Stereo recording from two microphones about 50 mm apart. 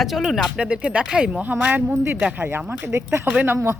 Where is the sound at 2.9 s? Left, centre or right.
Right.